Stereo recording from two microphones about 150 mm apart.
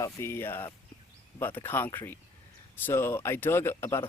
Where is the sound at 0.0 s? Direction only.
15° left (ahead or behind).